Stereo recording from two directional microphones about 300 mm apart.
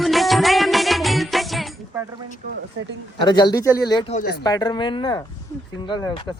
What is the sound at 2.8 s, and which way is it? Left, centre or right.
Speech, right.